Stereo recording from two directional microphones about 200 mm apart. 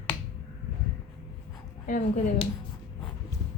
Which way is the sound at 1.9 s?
40° left (ahead or behind).